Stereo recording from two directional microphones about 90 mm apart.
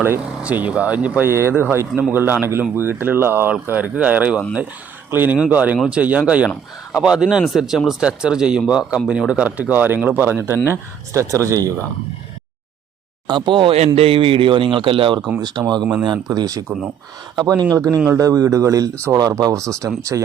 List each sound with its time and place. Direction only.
0.0 s speech: 20° right (ahead or behind)
1.3 s a man's voice: 30° right (ahead or behind)
13.2 s speech: 60° right (ahead or behind); by 15.2 s 75° right (ahead or behind)
15.4 s speech: 55° right (ahead or behind)
16.6 s speech: 5° right (ahead or behind)
17.6 s speech: 40° right (ahead or behind)